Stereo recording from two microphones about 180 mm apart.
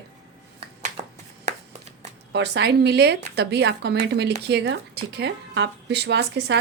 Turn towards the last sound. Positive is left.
turn(degrees=-70)  # may be behind; listen again after turning